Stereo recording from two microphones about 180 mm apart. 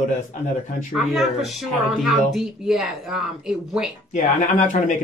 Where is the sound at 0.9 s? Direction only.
Centre (ahead or behind).